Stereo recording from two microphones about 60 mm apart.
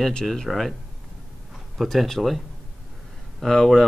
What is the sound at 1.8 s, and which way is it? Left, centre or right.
Speech, centre.